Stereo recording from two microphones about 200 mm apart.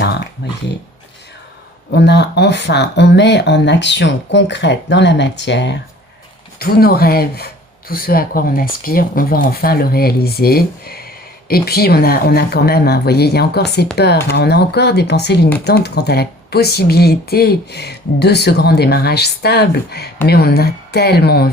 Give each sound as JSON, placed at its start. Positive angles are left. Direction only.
{"t": 0.4, "sound": "speech", "side_deg": 55}
{"t": 1.9, "sound": "speech", "side_deg": 55}
{"t": 6.6, "sound": "speech", "side_deg": 50}